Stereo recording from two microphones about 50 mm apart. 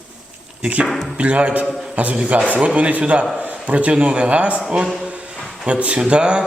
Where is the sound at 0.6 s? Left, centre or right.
Right.